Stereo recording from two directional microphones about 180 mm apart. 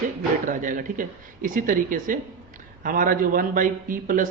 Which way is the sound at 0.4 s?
45° right (ahead or behind).